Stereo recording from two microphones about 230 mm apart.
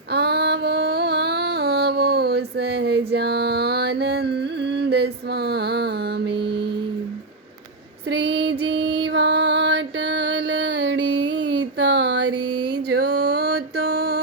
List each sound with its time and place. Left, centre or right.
0.1 s music: right
8.1 s female singing: right
12.5 s a sound: right
12.7 s music: right